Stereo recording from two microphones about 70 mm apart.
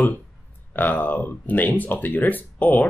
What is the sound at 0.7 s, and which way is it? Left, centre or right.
Speech, left.